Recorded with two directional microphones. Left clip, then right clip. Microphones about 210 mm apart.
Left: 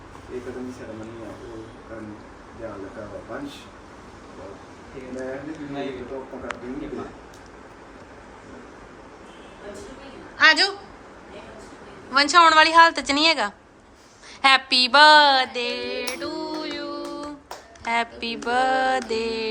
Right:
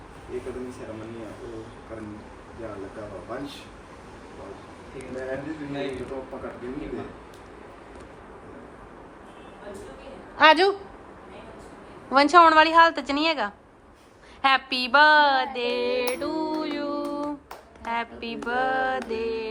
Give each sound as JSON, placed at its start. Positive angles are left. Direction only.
{"t": 10.3, "sound": "a woman's voice", "side_deg": -15}
{"t": 12.1, "sound": "a woman's voice", "side_deg": -10}
{"t": 14.4, "sound": "a sound", "side_deg": 0}
{"t": 17.8, "sound": "a woman's voice", "side_deg": 0}